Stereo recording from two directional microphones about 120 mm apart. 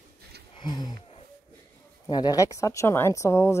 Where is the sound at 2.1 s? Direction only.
35° left (ahead or behind).